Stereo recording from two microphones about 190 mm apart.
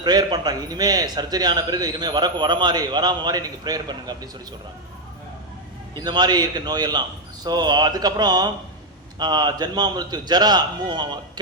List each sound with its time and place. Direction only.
0.0 s a man's voice: 20° right (ahead or behind)
5.9 s a man's voice: 20° right (ahead or behind)